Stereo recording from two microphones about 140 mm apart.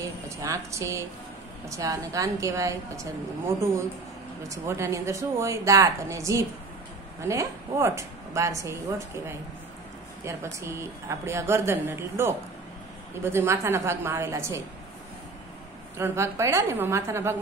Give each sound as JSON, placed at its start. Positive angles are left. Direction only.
{"t": 0.4, "sound": "a woman's voice", "side_deg": -20}
{"t": 10.2, "sound": "a woman's voice", "side_deg": -20}
{"t": 16.0, "sound": "a woman's voice", "side_deg": -20}